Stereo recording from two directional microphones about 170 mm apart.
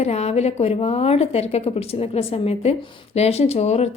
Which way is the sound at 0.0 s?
40° left (ahead or behind).